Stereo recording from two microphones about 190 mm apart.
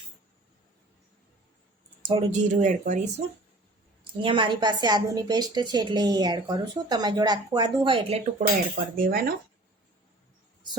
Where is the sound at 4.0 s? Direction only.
25° right (ahead or behind).